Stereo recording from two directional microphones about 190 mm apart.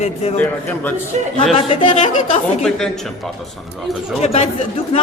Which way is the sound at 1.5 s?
30° left (ahead or behind).